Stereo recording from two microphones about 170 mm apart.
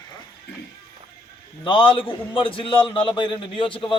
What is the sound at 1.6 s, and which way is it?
A man's voice, 30° left (ahead or behind).